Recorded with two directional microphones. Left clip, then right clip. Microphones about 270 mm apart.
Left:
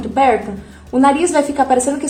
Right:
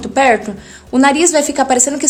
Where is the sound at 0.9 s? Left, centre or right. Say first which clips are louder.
Right 2 dB; right.